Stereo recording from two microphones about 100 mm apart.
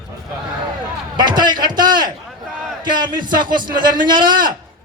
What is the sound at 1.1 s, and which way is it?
A man's voice, 45° right (ahead or behind).